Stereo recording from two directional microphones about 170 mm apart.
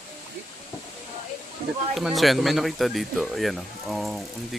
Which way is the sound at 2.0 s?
Centre (ahead or behind).